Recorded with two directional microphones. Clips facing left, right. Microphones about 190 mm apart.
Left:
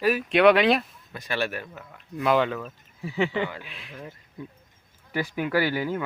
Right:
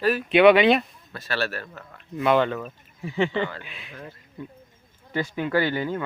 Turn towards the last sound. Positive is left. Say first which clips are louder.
# right 1 dB
turn(degrees=10)  # may be behind; listen again after turning